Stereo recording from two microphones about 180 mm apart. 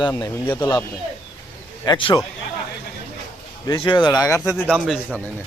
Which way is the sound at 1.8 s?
25° left (ahead or behind).